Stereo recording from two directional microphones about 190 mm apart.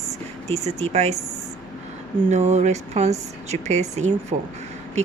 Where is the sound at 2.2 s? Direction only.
35° right (ahead or behind).